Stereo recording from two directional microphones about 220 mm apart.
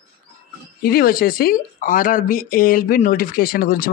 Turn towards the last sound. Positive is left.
turn(degrees=40)  # may be behind; listen again after turning